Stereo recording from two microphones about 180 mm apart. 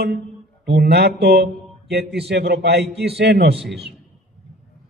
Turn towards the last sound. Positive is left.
turn(degrees=-65)  # may be behind; listen again after turning